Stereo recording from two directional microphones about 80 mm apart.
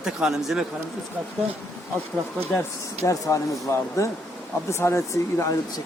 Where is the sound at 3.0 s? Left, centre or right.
Left.